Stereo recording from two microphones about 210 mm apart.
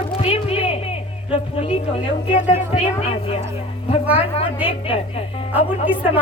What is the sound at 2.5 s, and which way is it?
Speech, 25° left (ahead or behind).